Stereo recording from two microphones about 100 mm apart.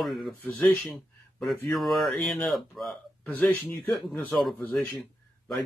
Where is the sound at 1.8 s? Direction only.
Centre (ahead or behind).